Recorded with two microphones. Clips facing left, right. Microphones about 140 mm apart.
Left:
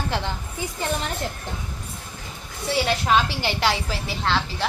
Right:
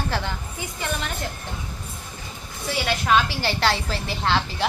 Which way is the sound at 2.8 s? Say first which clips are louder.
Even; 25° left (ahead or behind).